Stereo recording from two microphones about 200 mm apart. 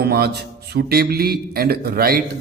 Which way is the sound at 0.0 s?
50° right (ahead or behind).